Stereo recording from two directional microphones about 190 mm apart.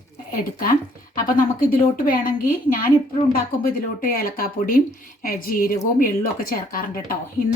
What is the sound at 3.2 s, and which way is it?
Speech, 35° left (ahead or behind).